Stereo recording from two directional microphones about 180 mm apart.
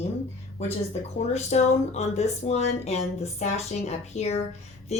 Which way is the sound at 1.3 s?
40° left (ahead or behind).